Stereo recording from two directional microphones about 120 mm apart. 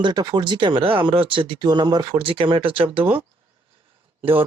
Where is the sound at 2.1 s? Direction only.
45° right (ahead or behind).